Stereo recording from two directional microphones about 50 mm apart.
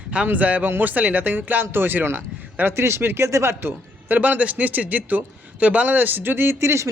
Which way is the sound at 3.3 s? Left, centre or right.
Right.